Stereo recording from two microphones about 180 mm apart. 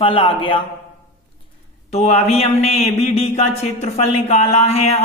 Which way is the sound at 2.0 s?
35° left (ahead or behind).